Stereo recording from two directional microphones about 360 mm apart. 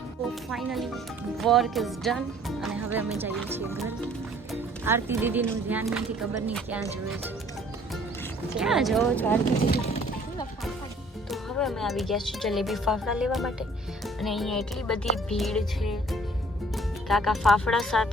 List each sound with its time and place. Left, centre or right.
0.5 s speech: centre
8.5 s speech: centre
9.6 s a sound: centre
11.3 s speech: centre